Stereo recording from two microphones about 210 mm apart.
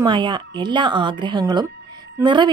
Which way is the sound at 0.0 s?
20° right (ahead or behind).